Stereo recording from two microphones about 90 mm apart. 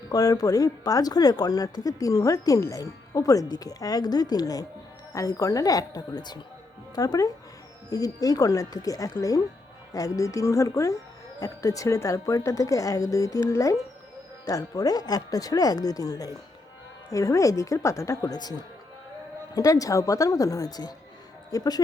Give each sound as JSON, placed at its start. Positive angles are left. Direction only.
{"t": 0.1, "sound": "speech", "side_deg": 45}
{"t": 19.5, "sound": "speech", "side_deg": 40}